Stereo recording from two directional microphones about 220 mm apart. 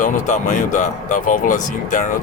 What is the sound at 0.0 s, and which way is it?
Speech, 35° left (ahead or behind).